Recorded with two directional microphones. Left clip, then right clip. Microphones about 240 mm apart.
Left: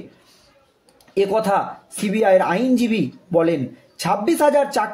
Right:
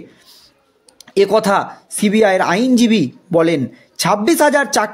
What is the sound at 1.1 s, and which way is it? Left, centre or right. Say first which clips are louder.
Speech: right 5 dB; right.